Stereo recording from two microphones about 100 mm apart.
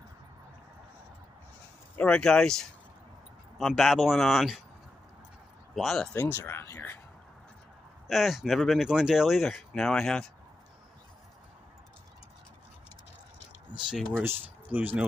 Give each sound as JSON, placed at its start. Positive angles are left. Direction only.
{"t": 2.0, "sound": "speech", "side_deg": 10}
{"t": 5.8, "sound": "speech", "side_deg": 0}
{"t": 6.1, "sound": "speech", "side_deg": 20}
{"t": 8.1, "sound": "speech", "side_deg": 0}
{"t": 14.1, "sound": "speech", "side_deg": -20}